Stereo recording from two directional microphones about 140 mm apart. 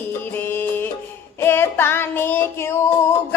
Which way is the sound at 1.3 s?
15° left (ahead or behind).